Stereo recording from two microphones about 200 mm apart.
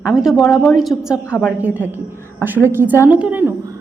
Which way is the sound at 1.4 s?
5° right (ahead or behind).